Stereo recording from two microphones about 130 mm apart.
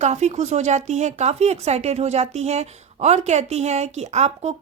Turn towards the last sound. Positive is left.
turn(degrees=-55)  # may be behind; listen again after turning